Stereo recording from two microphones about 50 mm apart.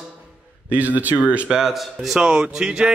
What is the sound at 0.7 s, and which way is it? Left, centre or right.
Speech, right.